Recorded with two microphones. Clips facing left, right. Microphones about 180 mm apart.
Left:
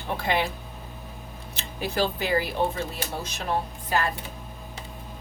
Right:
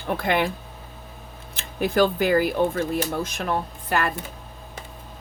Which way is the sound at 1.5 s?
50° right (ahead or behind).